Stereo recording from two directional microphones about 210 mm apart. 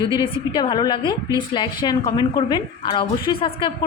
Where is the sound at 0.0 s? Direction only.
25° left (ahead or behind).